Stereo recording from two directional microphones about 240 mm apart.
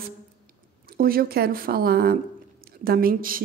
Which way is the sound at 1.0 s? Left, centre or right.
Right.